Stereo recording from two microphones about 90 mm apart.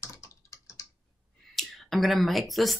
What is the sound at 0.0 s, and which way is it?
Typing, 30° left (ahead or behind).